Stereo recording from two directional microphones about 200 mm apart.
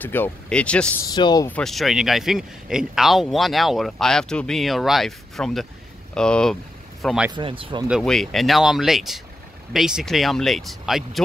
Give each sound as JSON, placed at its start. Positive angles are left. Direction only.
{"t": 0.0, "sound": "speech", "side_deg": 10}
{"t": 1.1, "sound": "speech", "side_deg": 20}
{"t": 1.5, "sound": "speech", "side_deg": 0}
{"t": 7.3, "sound": "speech", "side_deg": -25}
{"t": 7.9, "sound": "speech", "side_deg": 0}